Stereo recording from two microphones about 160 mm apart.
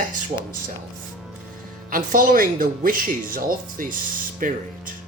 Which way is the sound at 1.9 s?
60° right (ahead or behind).